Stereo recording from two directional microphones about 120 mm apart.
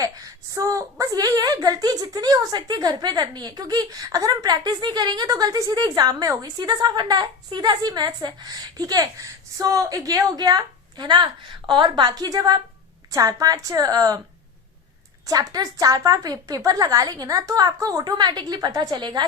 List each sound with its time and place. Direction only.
0.0 s a woman's voice: 30° right (ahead or behind)
15.3 s a woman's voice: 30° right (ahead or behind)